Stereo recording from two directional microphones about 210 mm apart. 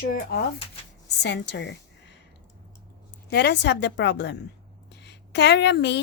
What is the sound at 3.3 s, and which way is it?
A woman's voice, 50° left (ahead or behind).